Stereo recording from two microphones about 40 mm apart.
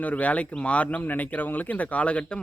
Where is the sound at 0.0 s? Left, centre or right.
Left.